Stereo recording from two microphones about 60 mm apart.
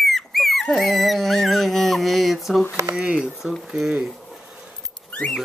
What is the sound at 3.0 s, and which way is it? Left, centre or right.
Speech, centre.